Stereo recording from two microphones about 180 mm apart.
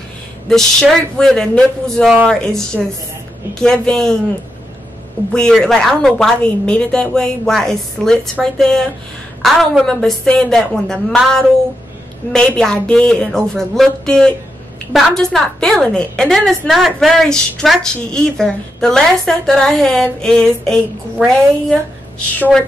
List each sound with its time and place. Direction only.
0.5 s a woman's voice: 5° left (ahead or behind)
5.3 s a woman's voice: 5° left (ahead or behind)
22.4 s a woman's voice: 5° left (ahead or behind)